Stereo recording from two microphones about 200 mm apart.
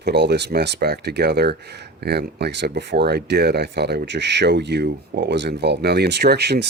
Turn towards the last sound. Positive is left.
turn(degrees=-55)  # may be behind; listen again after turning